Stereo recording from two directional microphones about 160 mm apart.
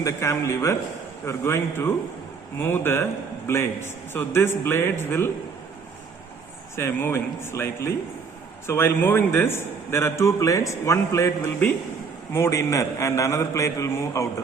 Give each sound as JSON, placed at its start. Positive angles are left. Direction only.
{"t": 0.0, "sound": "a man's voice", "side_deg": 20}
{"t": 6.7, "sound": "a man's voice", "side_deg": 15}